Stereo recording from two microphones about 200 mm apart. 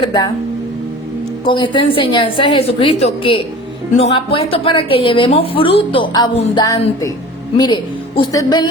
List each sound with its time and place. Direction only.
0.0 s a woman's voice: 20° left (ahead or behind)
1.5 s a woman's voice: 25° left (ahead or behind)